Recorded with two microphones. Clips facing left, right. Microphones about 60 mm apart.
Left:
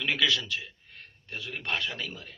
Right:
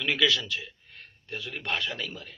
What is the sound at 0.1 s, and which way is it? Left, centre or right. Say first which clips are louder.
Speech: right 2 dB; left.